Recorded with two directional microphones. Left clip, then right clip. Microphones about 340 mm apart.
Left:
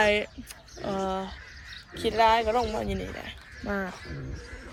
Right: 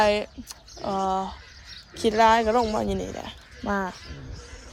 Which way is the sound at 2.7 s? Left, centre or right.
Centre.